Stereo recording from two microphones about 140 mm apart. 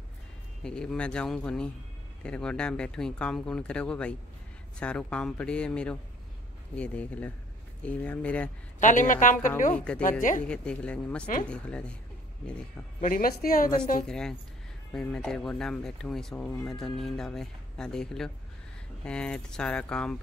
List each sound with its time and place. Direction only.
0.7 s speech: 5° left (ahead or behind)
8.7 s a woman's voice: 65° left (ahead or behind)
9.8 s speech: 10° left (ahead or behind)
13.0 s a woman's voice: 85° left
14.0 s speech: 5° left (ahead or behind)